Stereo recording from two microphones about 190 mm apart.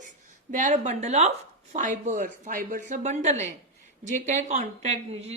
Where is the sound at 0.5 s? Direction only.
40° right (ahead or behind).